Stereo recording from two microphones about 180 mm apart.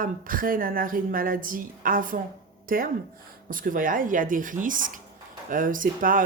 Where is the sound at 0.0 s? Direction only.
50° right (ahead or behind).